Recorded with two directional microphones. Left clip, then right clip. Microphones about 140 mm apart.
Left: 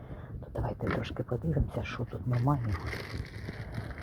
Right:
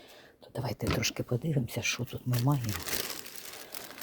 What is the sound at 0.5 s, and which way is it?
Speech, 35° right (ahead or behind).